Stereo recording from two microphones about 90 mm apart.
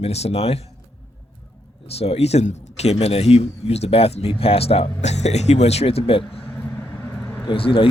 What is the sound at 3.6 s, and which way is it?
Speech, 90° left.